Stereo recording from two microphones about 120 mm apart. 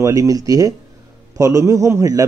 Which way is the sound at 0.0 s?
25° right (ahead or behind).